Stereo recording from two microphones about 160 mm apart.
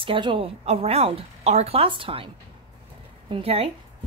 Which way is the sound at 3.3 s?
35° right (ahead or behind).